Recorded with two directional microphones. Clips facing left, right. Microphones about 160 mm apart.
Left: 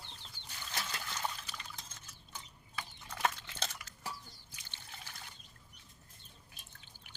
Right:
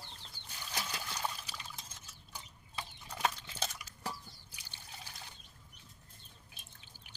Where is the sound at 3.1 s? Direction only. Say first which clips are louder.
Even; 15° right (ahead or behind).